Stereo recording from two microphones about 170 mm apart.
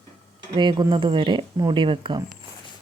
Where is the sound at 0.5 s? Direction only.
25° right (ahead or behind).